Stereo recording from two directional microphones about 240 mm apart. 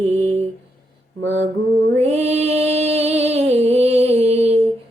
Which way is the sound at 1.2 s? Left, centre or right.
Right.